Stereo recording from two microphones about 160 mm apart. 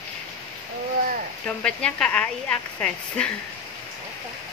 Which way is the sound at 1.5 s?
5° left (ahead or behind).